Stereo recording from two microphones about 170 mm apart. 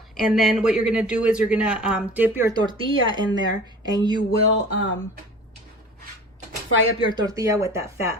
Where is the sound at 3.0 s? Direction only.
25° right (ahead or behind).